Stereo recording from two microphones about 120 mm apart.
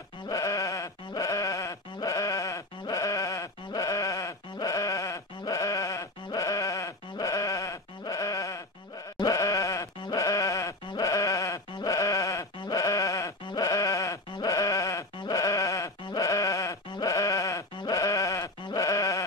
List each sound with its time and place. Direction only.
0.3 s sheep: 30° left (ahead or behind)
16.1 s bleat: 30° left (ahead or behind)
16.9 s sheep: 30° left (ahead or behind)